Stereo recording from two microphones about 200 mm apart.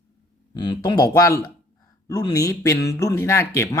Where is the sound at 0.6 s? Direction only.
20° left (ahead or behind).